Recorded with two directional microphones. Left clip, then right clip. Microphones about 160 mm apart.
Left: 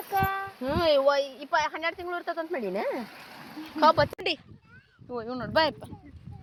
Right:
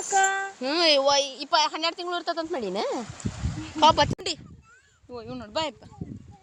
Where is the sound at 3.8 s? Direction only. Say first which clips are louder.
Right 2 dB; 35° right (ahead or behind).